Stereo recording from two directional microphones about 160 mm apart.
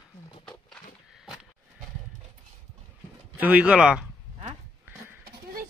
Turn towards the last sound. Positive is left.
turn(degrees=-5)  # may be behind; listen again after turning